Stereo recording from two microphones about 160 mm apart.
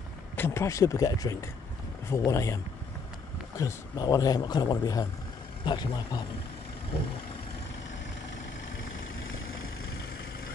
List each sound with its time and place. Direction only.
0.4 s speech: 15° left (ahead or behind)